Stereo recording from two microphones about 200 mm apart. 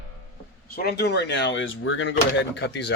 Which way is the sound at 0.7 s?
50° left (ahead or behind).